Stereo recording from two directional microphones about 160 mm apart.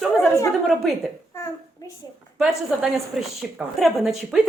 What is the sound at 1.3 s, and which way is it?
Babbling, 20° left (ahead or behind).